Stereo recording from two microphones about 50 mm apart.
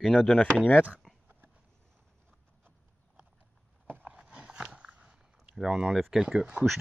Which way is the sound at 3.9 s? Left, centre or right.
Right.